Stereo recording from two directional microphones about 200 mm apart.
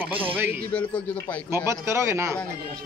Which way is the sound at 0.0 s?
10° right (ahead or behind).